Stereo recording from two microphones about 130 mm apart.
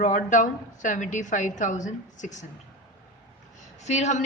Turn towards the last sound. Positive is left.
turn(degrees=60)  # may be behind; listen again after turning